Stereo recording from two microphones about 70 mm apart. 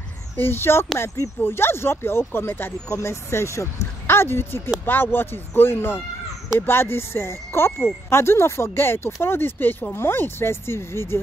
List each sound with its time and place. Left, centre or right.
0.4 s speech: left
2.9 s speech: left